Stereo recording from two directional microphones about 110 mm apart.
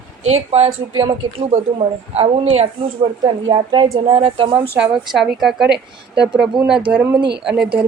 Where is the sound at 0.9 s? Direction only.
55° right (ahead or behind).